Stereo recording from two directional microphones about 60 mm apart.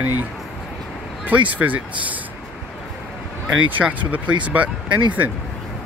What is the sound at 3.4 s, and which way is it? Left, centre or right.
Speech, right.